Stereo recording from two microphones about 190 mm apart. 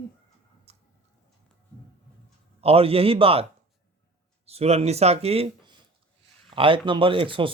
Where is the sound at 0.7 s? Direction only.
35° right (ahead or behind).